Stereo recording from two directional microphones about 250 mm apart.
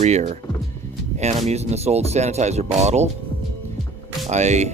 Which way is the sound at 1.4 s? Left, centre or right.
Right.